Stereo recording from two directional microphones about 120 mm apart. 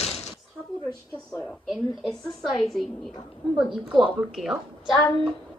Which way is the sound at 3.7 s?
5° right (ahead or behind).